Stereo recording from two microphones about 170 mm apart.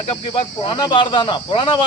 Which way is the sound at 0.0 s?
30° left (ahead or behind).